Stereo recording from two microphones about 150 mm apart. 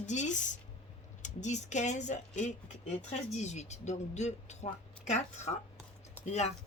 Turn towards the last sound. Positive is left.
turn(degrees=50)  # may be behind; listen again after turning